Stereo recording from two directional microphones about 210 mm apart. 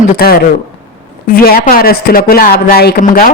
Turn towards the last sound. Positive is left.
turn(degrees=45)  # may be behind; listen again after turning